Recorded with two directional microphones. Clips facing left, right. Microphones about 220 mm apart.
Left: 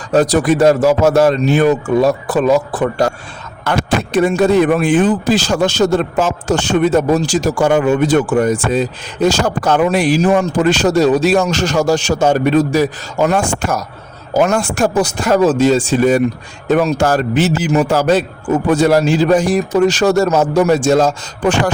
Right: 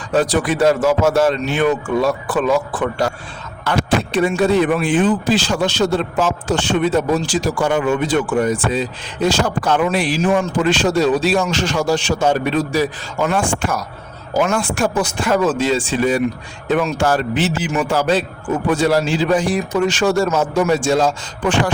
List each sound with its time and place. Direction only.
0.1 s a man's voice: 40° left (ahead or behind)